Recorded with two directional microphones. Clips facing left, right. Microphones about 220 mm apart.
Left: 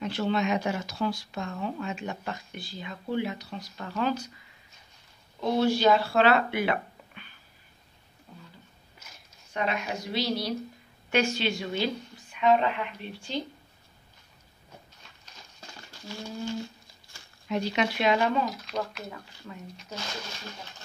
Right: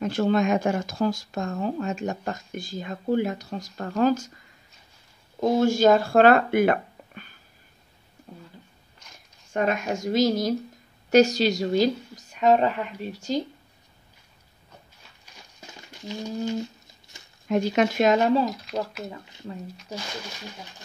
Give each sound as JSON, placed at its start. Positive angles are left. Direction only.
{"t": 0.0, "sound": "speech", "side_deg": -45}
{"t": 5.4, "sound": "speech", "side_deg": -45}
{"t": 9.0, "sound": "a sound", "side_deg": 5}
{"t": 9.5, "sound": "a woman's voice", "side_deg": -50}
{"t": 15.6, "sound": "a sound", "side_deg": -20}
{"t": 17.5, "sound": "speech", "side_deg": -45}
{"t": 18.4, "sound": "speech", "side_deg": 0}